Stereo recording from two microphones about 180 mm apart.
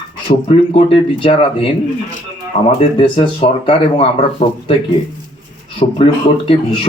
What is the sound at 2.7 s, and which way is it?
Speech, 25° left (ahead or behind).